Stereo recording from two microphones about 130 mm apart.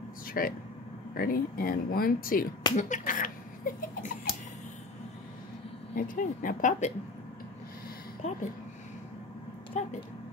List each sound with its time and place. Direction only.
0.3 s speech: 90° left
2.7 s speech: 75° left (ahead or behind); by 4.3 s 90° left
5.9 s speech: 90° left
8.2 s speech: 60° left (ahead or behind)
9.8 s speech: 65° left (ahead or behind)